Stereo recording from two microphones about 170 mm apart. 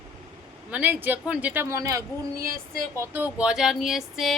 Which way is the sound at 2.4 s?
55° right (ahead or behind).